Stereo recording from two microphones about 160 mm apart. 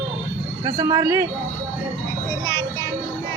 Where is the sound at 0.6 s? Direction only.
25° right (ahead or behind).